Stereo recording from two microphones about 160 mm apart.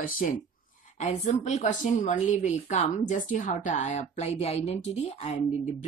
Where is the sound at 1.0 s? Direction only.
45° left (ahead or behind).